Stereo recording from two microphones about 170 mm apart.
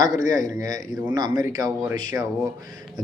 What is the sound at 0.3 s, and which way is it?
Speech, 20° right (ahead or behind).